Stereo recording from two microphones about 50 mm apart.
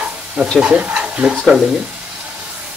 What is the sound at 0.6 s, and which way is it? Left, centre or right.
Speech, right.